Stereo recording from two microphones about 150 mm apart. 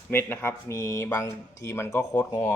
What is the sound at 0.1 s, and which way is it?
Speech, 15° left (ahead or behind).